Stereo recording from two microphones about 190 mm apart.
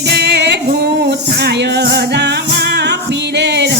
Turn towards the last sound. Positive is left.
turn(degrees=-65)  # may be behind; listen again after turning